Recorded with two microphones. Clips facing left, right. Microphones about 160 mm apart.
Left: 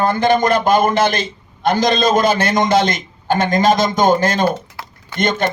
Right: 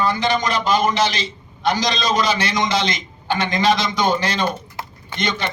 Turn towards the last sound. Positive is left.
turn(degrees=50)  # may be behind; listen again after turning